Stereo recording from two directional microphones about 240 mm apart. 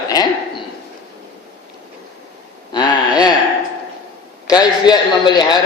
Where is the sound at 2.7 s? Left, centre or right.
Centre.